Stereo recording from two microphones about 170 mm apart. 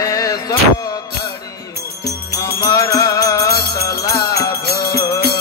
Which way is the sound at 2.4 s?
20° left (ahead or behind).